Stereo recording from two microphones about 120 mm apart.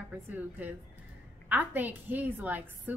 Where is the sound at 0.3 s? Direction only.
15° right (ahead or behind).